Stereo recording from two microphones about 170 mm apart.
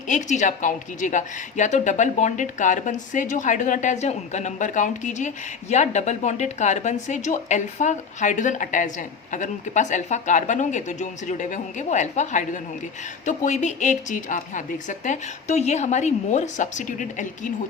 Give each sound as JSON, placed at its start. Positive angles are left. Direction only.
{"t": 0.1, "sound": "a woman's voice", "side_deg": 45}